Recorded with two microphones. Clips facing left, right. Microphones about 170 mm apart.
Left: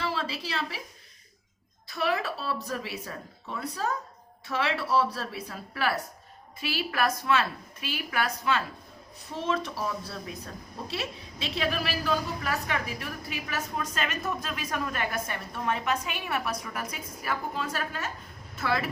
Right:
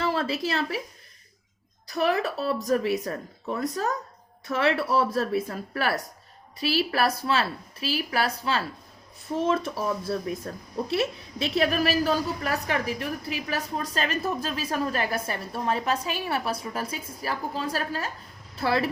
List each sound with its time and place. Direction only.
0.0 s a woman's voice: 50° right (ahead or behind)
1.9 s a woman's voice: 45° right (ahead or behind)
9.4 s speech: 45° right (ahead or behind)
11.5 s a woman's voice: 45° right (ahead or behind)